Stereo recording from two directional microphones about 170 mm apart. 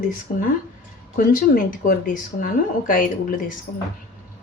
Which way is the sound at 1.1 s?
55° left (ahead or behind).